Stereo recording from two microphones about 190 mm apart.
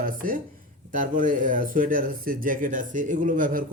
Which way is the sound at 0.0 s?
45° right (ahead or behind).